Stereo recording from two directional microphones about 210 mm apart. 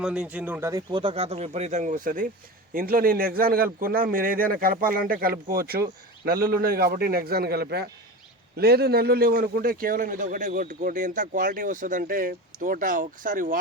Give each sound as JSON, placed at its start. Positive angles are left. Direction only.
{"t": 0.0, "sound": "a man's voice", "side_deg": -5}